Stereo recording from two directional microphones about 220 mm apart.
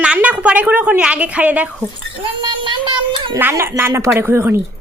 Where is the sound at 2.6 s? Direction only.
20° right (ahead or behind).